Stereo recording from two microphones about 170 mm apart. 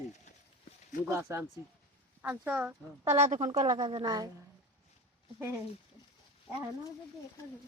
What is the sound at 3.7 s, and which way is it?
Speech, 25° right (ahead or behind).